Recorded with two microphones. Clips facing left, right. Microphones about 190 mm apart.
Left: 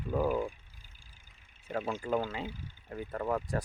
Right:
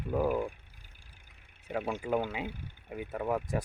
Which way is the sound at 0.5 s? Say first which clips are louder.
Right 2 dB; 60° right (ahead or behind).